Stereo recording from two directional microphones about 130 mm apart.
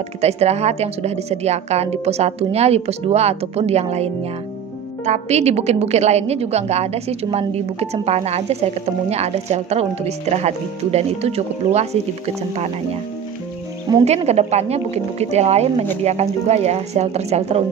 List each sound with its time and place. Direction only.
0.2 s a woman's voice: 55° right (ahead or behind)
14.0 s a woman's voice: 55° right (ahead or behind)